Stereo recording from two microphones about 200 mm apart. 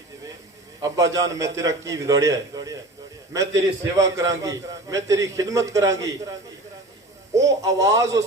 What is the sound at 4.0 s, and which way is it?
A man's voice, 15° right (ahead or behind).